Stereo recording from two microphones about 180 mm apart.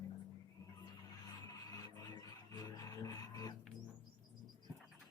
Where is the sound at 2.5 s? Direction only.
20° left (ahead or behind).